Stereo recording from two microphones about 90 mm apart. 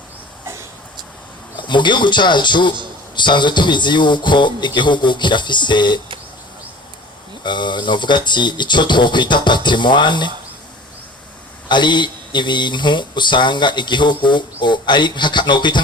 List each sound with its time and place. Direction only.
1.5 s speech: 60° left (ahead or behind)
7.4 s speech: 55° left (ahead or behind)
11.7 s speech: 60° left (ahead or behind)